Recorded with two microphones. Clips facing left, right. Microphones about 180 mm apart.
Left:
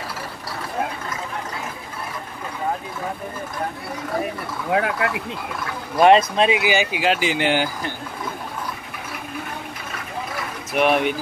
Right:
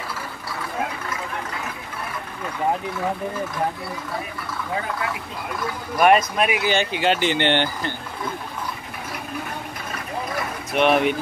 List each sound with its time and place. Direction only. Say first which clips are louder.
4.7 s speech: left 6 dB; 70° left (ahead or behind)
5.9 s speech: left 3 dB; 25° left (ahead or behind)
6.6 s speech: left 1 dB; 5° left (ahead or behind)
10.7 s speech: even; centre (ahead or behind)